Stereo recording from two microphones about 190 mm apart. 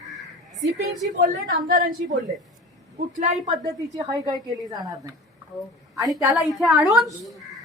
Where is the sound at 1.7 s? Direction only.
45° right (ahead or behind).